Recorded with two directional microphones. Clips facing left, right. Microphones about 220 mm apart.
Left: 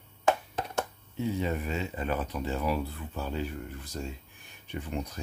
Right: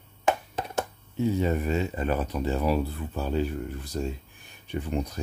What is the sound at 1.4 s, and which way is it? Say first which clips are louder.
Speech: right 6 dB; 45° right (ahead or behind).